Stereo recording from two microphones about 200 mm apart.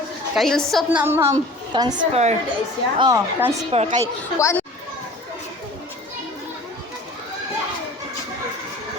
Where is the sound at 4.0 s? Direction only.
15° left (ahead or behind).